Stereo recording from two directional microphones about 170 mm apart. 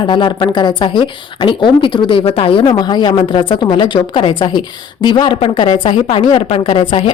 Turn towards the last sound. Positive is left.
turn(degrees=30)  # may be behind; listen again after turning